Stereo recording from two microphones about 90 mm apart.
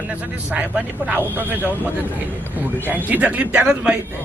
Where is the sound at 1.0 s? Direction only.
20° right (ahead or behind).